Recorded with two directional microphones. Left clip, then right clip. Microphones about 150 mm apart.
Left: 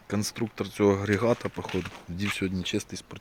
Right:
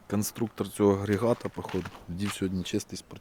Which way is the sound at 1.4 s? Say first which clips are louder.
Left 2 dB; 5° right (ahead or behind).